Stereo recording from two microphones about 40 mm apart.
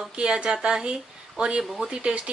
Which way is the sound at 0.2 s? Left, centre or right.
Right.